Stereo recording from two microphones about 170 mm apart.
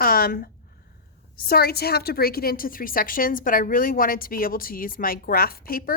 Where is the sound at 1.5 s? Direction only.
65° left (ahead or behind).